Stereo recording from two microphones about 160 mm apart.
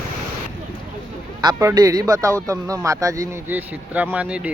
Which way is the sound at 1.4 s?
20° right (ahead or behind).